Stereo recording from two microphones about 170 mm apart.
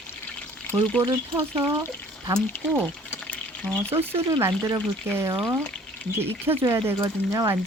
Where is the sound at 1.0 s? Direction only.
15° right (ahead or behind).